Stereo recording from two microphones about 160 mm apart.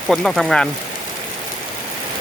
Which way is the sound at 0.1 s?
Centre (ahead or behind).